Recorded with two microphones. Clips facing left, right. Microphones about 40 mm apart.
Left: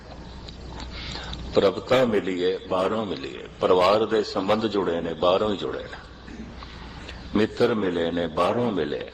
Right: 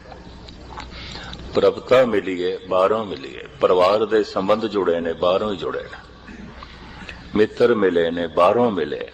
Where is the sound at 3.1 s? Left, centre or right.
Right.